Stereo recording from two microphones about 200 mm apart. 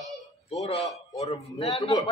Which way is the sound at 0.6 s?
30° left (ahead or behind).